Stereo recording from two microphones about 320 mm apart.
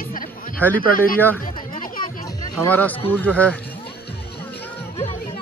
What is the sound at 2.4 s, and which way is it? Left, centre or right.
Speech, centre.